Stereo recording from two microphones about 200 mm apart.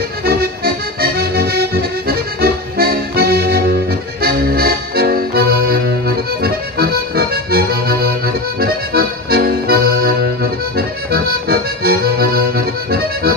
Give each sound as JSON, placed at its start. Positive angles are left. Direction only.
{"t": 0.2, "sound": "music", "side_deg": -50}
{"t": 4.2, "sound": "accordion", "side_deg": -50}